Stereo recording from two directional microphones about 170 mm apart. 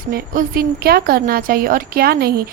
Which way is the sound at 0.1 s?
60° right (ahead or behind).